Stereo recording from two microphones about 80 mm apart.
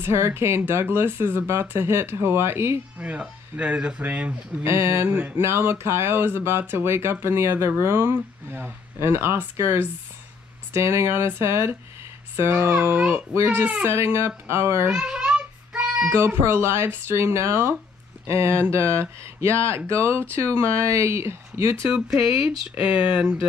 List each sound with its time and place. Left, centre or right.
0.0 s speech: right
3.0 s speech: centre
4.6 s speech: right
12.7 s speech: centre
13.1 s speech: right
14.9 s child singing: centre
16.2 s speech: right
22.8 s speech: centre